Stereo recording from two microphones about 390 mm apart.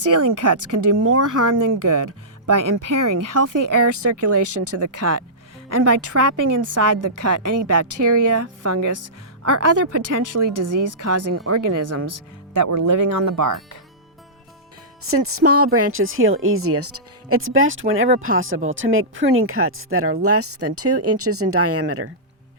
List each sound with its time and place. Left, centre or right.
0.0 s speech: right
9.4 s speech: right
15.0 s speech: right